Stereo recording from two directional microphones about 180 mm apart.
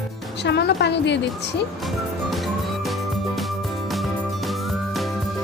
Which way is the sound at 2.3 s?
Centre (ahead or behind).